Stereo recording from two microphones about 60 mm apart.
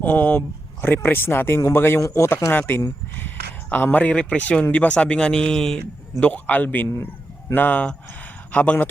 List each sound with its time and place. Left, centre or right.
0.0 s speech: left
2.0 s speech: left
2.5 s speech: left
3.2 s a sound: left
3.9 s speech: left